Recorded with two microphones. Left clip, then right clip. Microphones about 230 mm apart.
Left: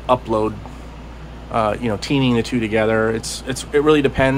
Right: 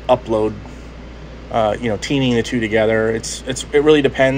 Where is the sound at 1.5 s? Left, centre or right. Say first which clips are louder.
Right 2 dB; centre.